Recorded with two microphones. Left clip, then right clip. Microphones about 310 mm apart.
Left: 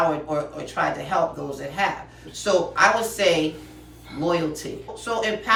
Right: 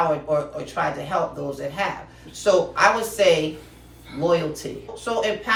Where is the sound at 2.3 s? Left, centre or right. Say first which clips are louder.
Right 2 dB; centre.